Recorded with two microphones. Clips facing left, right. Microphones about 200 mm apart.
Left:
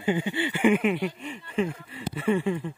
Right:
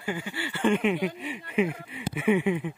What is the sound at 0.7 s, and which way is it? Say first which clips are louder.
Speech: even; centre (ahead or behind).